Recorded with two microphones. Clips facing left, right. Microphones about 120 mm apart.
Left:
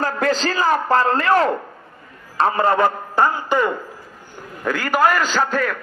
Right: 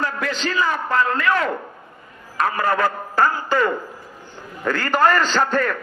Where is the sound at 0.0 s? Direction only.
35° left (ahead or behind).